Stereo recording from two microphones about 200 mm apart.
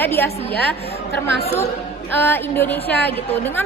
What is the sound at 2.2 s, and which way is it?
A woman's voice, 10° left (ahead or behind).